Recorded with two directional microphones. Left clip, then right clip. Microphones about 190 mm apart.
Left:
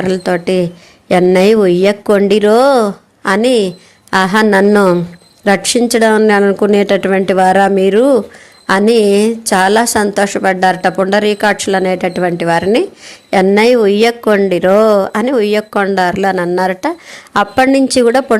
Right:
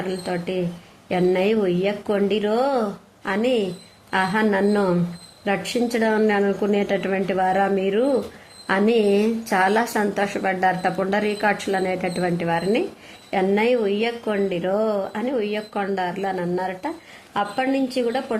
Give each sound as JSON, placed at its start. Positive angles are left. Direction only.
{"t": 0.1, "sound": "a woman's voice", "side_deg": 35}